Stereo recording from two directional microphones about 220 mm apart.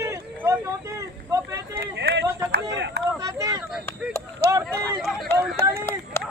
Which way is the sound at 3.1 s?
15° right (ahead or behind).